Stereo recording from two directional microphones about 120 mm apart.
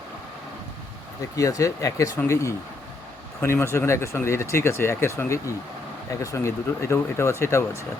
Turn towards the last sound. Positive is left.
turn(degrees=25)  # may be behind; listen again after turning